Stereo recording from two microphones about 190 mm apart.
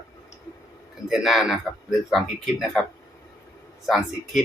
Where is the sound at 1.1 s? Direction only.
Centre (ahead or behind).